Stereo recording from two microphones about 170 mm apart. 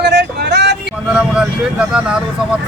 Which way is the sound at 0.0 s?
90° right.